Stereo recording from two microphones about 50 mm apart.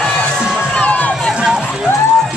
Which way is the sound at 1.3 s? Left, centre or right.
Centre.